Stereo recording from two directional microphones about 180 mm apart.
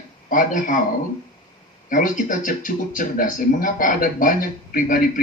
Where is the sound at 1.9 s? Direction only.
50° left (ahead or behind).